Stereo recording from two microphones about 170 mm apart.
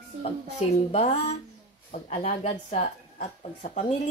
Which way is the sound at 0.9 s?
40° left (ahead or behind).